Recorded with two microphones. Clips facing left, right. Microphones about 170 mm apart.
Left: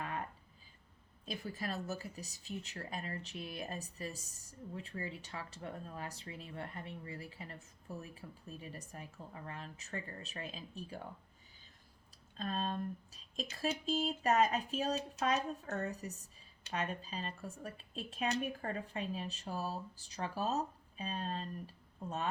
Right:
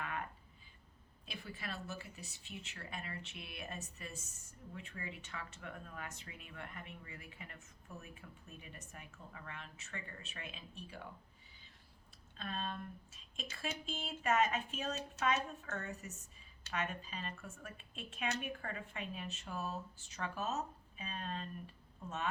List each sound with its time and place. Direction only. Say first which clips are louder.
0.0 s a sound: left 2 dB; 35° left (ahead or behind)
1.2 s speech: left 6 dB; 40° left (ahead or behind)
12.4 s speech: left 5 dB; 35° left (ahead or behind)